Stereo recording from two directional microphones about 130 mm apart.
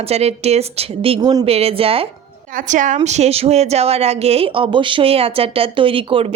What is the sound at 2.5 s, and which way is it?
A woman's voice, 85° right.